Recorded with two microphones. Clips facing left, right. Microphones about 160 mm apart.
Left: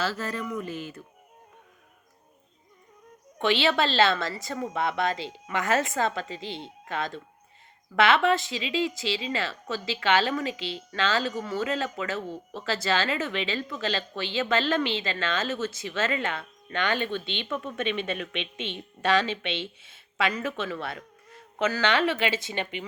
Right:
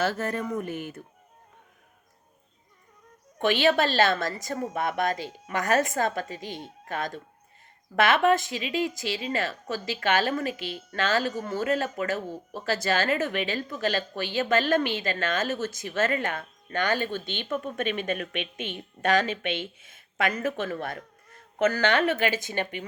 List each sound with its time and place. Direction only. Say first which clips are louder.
0.0 s speech: right 3 dB; 55° right (ahead or behind)
3.4 s speech: right 2 dB; 45° right (ahead or behind)
18.3 s a woman's voice: right 1 dB; 25° left (ahead or behind)
19.0 s speech: right 1 dB; 45° right (ahead or behind)